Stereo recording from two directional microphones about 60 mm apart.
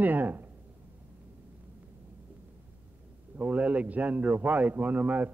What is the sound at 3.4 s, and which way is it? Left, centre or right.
A man's voice, right.